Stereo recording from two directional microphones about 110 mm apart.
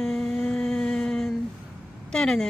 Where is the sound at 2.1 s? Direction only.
5° left (ahead or behind).